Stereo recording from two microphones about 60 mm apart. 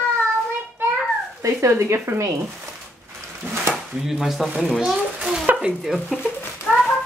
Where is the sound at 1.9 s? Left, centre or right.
Right.